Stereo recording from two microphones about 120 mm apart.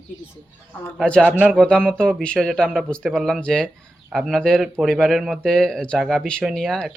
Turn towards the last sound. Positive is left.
turn(degrees=5)  # may be behind; listen again after turning